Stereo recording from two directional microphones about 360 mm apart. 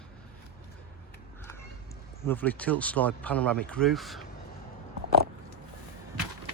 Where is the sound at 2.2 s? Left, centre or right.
Centre.